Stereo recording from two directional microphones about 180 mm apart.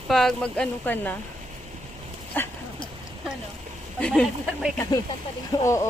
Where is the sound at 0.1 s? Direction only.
Centre (ahead or behind).